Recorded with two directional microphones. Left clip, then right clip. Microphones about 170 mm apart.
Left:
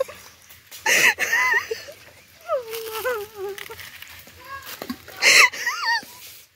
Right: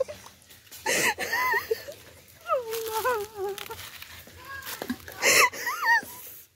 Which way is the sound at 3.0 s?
35° right (ahead or behind).